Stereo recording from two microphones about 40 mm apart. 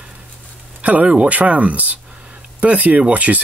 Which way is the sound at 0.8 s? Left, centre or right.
Right.